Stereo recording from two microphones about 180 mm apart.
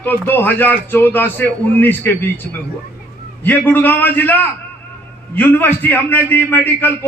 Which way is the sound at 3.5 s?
10° left (ahead or behind).